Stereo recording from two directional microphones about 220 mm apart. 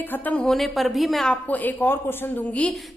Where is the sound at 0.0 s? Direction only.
10° left (ahead or behind).